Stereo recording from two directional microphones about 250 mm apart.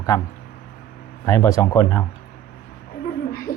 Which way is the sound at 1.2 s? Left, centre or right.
Centre.